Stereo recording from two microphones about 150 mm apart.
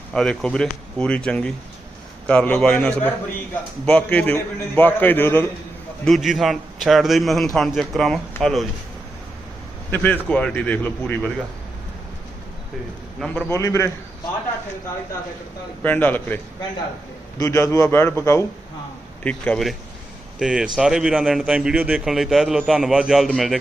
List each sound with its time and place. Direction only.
0.1 s a man's voice: 5° left (ahead or behind)
6.1 s a man's voice: centre (ahead or behind)
9.9 s a man's voice: 10° left (ahead or behind)
13.1 s a man's voice: centre (ahead or behind)
13.5 s a man's voice: 20° left (ahead or behind)
15.8 s a man's voice: 10° left (ahead or behind)
20.4 s a man's voice: 5° right (ahead or behind)